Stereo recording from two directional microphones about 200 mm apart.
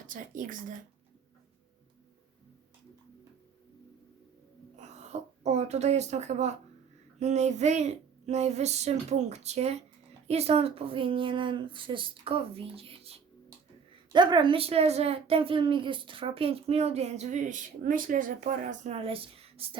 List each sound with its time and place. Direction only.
0.1 s speech: 40° right (ahead or behind)
4.8 s a sound: 35° right (ahead or behind)
7.2 s a woman's voice: 35° right (ahead or behind)